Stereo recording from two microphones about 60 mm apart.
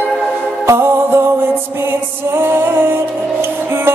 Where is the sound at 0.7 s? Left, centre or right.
Right.